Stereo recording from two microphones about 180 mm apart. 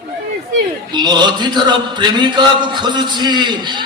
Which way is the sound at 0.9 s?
25° right (ahead or behind).